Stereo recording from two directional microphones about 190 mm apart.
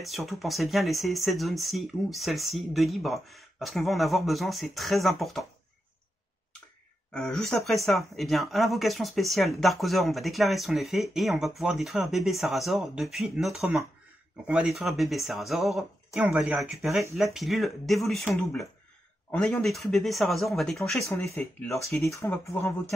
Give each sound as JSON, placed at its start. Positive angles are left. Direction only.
{"t": 0.0, "sound": "speech", "side_deg": 0}
{"t": 7.2, "sound": "speech", "side_deg": 5}